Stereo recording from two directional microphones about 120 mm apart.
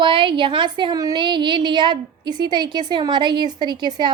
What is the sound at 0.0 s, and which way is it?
A woman's voice, 40° right (ahead or behind).